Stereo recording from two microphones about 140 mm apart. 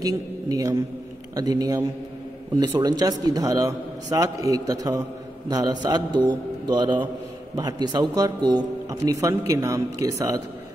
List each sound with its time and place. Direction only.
0.0 s a man's voice: 25° right (ahead or behind)